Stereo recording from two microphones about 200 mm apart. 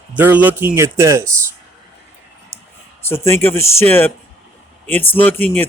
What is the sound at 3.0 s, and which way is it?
Speech, 10° left (ahead or behind).